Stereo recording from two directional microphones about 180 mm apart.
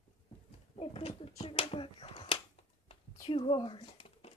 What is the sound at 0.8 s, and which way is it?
Speech, 30° left (ahead or behind).